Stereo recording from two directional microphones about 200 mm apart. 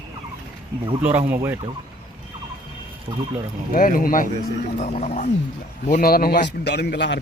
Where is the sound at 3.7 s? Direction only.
45° left (ahead or behind).